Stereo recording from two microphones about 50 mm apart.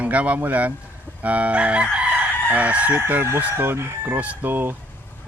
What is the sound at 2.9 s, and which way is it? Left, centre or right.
Chicken, right.